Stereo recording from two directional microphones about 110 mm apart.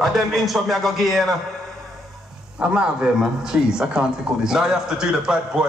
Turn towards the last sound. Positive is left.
turn(degrees=-5)  # may be behind; listen again after turning